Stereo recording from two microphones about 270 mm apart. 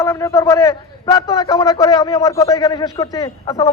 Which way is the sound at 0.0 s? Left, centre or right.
Centre.